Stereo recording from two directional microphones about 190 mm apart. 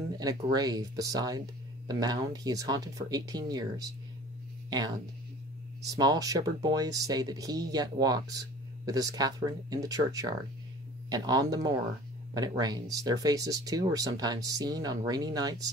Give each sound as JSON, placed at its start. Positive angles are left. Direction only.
{"t": 0.2, "sound": "speech", "side_deg": -20}